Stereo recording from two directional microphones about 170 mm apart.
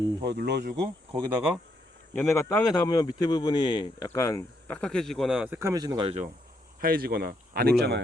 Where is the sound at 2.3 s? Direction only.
20° left (ahead or behind); by 6.1 s 25° right (ahead or behind).